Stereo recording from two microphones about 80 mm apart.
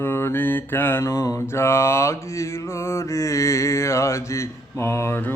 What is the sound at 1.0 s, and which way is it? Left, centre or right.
Mantra, left.